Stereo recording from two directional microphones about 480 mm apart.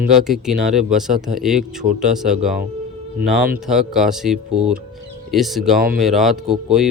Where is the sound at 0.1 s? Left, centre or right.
Centre.